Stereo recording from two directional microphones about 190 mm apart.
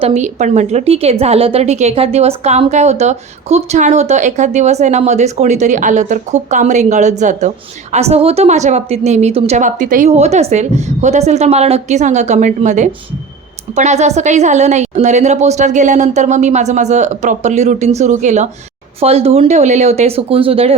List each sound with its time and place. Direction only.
0.0 s a woman's voice: 35° right (ahead or behind)